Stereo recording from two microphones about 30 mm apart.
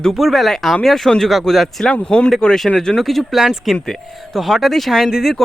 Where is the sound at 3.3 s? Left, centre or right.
Centre.